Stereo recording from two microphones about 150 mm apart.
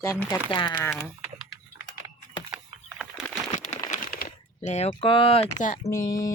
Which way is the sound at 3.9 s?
60° left (ahead or behind).